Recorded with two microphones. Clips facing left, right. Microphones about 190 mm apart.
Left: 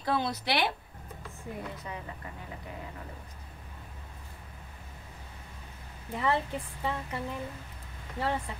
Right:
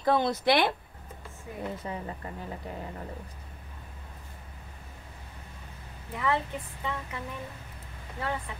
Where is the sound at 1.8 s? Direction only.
35° right (ahead or behind).